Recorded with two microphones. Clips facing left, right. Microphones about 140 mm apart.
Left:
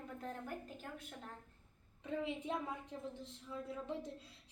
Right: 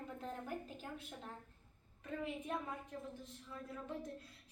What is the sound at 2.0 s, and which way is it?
A woman's voice, 20° left (ahead or behind).